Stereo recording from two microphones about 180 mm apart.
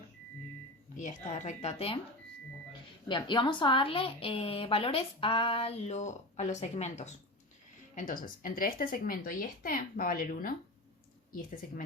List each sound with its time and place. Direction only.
0.9 s a woman's voice: 40° left (ahead or behind)
3.1 s a woman's voice: 25° left (ahead or behind); by 10.5 s 55° left (ahead or behind)